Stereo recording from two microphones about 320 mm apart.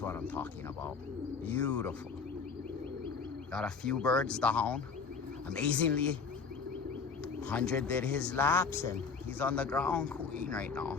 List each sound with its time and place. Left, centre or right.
0.0 s a sound: centre
1.5 s speech: centre
3.5 s speech: centre
7.4 s speech: centre
8.7 s speech: right
9.4 s speech: centre